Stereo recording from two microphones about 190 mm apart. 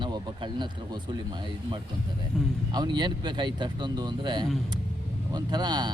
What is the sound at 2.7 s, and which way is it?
Speech, 20° right (ahead or behind).